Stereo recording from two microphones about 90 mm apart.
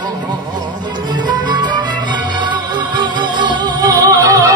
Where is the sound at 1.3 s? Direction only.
55° right (ahead or behind).